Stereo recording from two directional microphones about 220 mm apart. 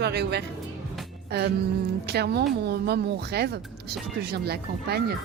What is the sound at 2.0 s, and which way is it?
Speech, 45° right (ahead or behind).